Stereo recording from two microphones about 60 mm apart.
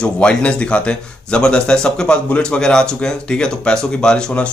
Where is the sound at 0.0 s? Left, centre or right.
Centre.